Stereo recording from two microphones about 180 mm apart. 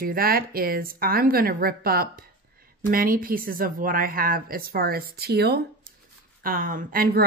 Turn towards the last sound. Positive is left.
turn(degrees=-55)  # may be behind; listen again after turning